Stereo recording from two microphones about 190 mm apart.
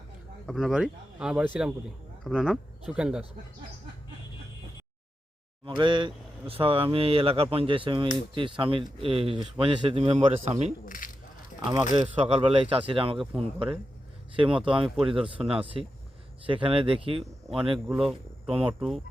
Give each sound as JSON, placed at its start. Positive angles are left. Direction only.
{"t": 0.4, "sound": "a man's voice", "side_deg": 0}
{"t": 5.6, "sound": "a man's voice", "side_deg": -25}
{"t": 10.8, "sound": "speech", "side_deg": 45}
{"t": 12.1, "sound": "speech", "side_deg": -30}
{"t": 14.3, "sound": "speech", "side_deg": -25}
{"t": 17.8, "sound": "a man's voice", "side_deg": 0}
{"t": 18.4, "sound": "speech", "side_deg": -30}
{"t": 18.7, "sound": "a man's voice", "side_deg": 0}